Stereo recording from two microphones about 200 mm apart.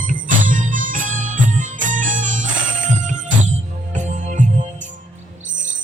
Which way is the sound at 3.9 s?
40° right (ahead or behind).